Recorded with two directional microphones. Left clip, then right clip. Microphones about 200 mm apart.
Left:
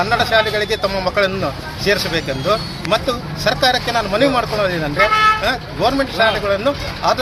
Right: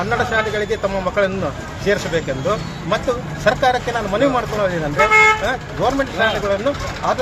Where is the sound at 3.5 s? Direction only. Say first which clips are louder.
Even; 5° left (ahead or behind).